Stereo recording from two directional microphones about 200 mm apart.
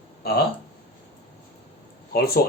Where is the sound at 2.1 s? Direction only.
50° left (ahead or behind).